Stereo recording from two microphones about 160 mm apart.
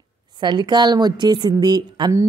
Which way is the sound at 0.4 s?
25° right (ahead or behind).